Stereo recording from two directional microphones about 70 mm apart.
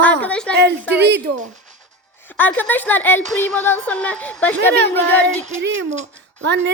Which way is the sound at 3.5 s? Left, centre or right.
Left.